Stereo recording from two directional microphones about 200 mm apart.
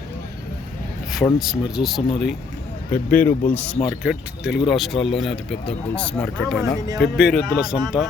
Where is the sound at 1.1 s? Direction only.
Centre (ahead or behind).